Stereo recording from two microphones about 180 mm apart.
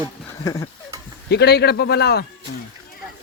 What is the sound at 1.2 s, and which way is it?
A man's voice, 65° left (ahead or behind).